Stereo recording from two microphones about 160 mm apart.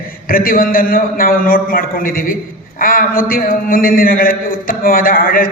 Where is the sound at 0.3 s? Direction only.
65° left (ahead or behind).